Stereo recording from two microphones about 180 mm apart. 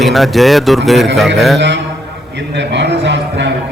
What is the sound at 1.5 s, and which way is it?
Mantra, 75° right (ahead or behind).